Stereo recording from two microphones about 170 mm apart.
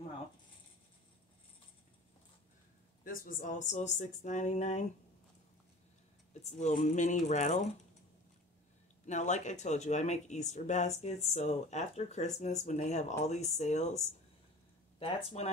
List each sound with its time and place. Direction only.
3.0 s speech: 55° left (ahead or behind)
6.4 s speech: 45° left (ahead or behind)
9.0 s speech: 45° left (ahead or behind)